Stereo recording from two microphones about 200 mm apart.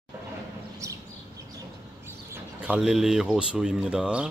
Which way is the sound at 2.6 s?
5° right (ahead or behind).